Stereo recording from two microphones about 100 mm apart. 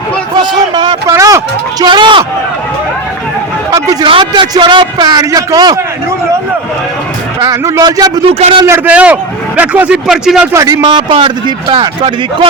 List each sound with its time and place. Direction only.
0.7 s a sound: 50° right (ahead or behind)
1.0 s a sound: 35° right (ahead or behind)
1.8 s a man's voice: 50° right (ahead or behind)
3.7 s vehicle: 35° right (ahead or behind)
4.0 s a man's voice: 55° right (ahead or behind); by 5.8 s 40° right (ahead or behind)
7.4 s a sound: 30° right (ahead or behind)
7.8 s a man's voice: 40° right (ahead or behind)
8.3 s a man's voice: 90° right
8.6 s a man's voice: 25° right (ahead or behind)
8.9 s speech: 15° right (ahead or behind)
10.5 s speech: 35° right (ahead or behind)
10.9 s a man's voice: 55° right (ahead or behind)